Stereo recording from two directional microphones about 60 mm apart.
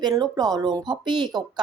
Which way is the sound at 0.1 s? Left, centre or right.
Right.